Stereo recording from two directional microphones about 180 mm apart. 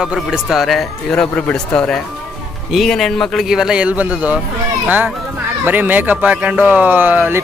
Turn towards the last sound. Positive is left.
turn(degrees=-10)  # may be behind; listen again after turning